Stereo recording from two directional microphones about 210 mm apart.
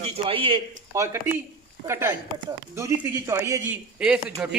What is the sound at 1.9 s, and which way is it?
A man's voice, 10° right (ahead or behind).